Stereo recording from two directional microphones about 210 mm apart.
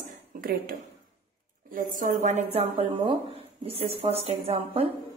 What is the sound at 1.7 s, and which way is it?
A woman's voice, 40° right (ahead or behind).